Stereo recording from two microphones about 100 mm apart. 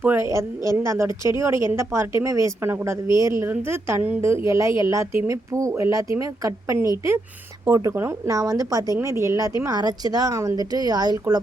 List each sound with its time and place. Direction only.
0.0 s a woman's voice: 20° right (ahead or behind); by 11.3 s 40° right (ahead or behind)